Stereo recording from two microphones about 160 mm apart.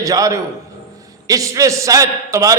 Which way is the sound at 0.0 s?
20° right (ahead or behind).